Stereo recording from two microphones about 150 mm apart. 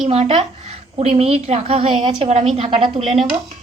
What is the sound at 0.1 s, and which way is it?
A woman's voice, 45° right (ahead or behind).